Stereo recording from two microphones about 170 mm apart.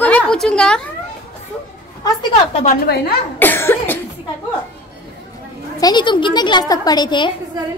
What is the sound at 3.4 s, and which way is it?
Cough, 10° left (ahead or behind).